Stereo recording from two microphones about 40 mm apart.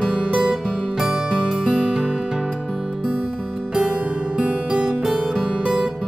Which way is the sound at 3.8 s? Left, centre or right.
Right.